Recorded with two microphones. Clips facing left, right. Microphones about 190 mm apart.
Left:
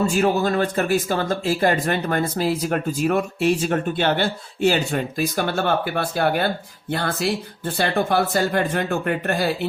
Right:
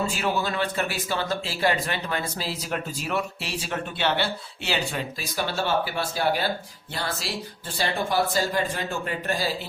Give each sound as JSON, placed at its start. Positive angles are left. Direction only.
{"t": 0.1, "sound": "speech", "side_deg": 45}